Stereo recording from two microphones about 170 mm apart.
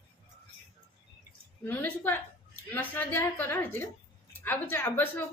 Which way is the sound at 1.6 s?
10° left (ahead or behind).